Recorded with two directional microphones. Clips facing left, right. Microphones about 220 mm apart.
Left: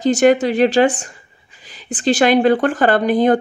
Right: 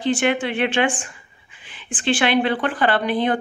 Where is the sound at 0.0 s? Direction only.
40° left (ahead or behind).